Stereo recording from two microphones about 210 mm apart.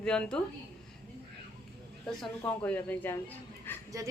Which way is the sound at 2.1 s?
5° left (ahead or behind).